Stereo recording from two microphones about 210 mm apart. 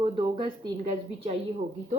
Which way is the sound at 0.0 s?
25° right (ahead or behind).